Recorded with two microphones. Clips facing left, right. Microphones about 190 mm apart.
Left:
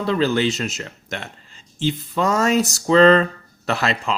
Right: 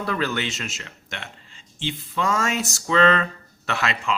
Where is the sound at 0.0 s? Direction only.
30° left (ahead or behind).